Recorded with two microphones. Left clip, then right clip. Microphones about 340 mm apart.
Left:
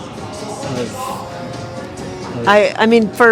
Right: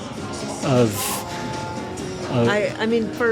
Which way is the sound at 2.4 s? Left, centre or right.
Left.